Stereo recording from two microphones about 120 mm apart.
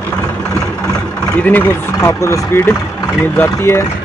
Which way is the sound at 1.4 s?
15° left (ahead or behind).